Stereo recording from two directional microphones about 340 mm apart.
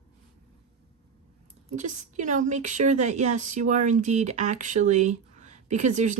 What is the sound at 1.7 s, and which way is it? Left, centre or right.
A woman's voice, right.